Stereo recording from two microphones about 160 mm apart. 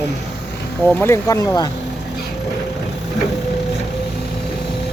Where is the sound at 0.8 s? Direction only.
15° left (ahead or behind).